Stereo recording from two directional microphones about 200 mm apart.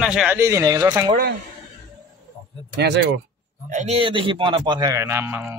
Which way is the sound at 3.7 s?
30° right (ahead or behind).